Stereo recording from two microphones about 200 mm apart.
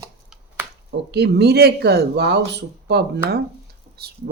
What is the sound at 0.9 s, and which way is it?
Speech, 55° right (ahead or behind).